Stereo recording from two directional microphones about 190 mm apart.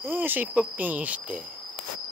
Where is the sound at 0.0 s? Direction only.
10° right (ahead or behind).